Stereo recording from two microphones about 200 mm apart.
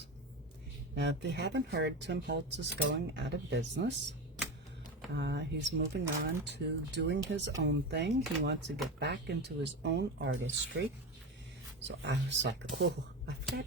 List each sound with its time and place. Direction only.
0.9 s speech: 60° right (ahead or behind)
5.1 s speech: 60° right (ahead or behind)
11.9 s speech: 60° right (ahead or behind)